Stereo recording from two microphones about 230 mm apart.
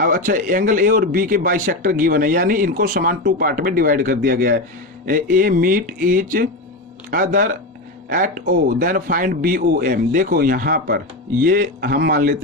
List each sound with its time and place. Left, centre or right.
0.0 s speech: right